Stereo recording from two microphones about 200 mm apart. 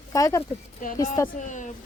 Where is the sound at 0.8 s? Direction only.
40° left (ahead or behind).